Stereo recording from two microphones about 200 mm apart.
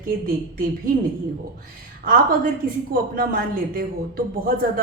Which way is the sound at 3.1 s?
45° right (ahead or behind).